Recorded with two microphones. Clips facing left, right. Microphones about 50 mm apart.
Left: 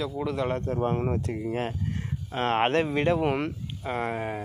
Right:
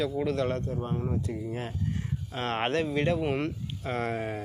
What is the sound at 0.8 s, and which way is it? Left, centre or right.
Speech, left.